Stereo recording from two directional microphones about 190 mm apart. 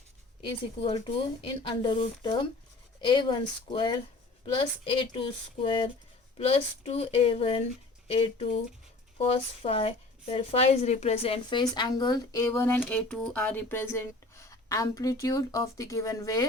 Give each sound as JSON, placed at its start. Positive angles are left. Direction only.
{"t": 1.0, "sound": "speech", "side_deg": 25}